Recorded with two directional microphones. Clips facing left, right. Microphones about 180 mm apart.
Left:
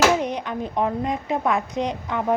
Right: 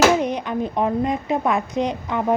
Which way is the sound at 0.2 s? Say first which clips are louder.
Right 3 dB; 10° right (ahead or behind).